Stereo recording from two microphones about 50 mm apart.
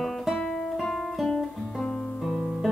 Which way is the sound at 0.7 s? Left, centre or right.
Centre.